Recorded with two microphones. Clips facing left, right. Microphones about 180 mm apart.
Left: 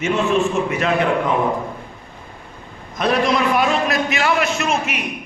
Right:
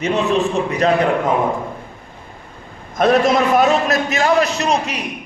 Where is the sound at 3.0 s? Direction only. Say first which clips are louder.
Right 4 dB; 45° right (ahead or behind).